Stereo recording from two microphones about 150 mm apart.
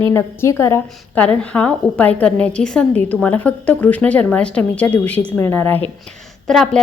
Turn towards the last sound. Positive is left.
turn(degrees=5)  # may be behind; listen again after turning